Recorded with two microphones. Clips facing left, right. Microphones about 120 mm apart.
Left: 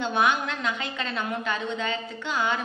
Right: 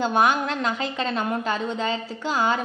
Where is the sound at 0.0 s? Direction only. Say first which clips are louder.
Right 4 dB; 40° right (ahead or behind).